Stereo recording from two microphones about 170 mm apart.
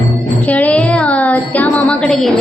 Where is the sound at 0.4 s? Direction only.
10° left (ahead or behind).